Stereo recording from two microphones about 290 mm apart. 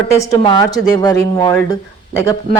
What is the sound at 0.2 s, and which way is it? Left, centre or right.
A woman's voice, centre.